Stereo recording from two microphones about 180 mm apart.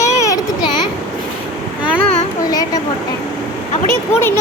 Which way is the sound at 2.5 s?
20° left (ahead or behind).